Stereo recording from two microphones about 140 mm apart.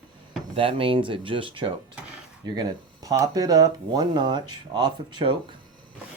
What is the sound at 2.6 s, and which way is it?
Speech, 25° right (ahead or behind).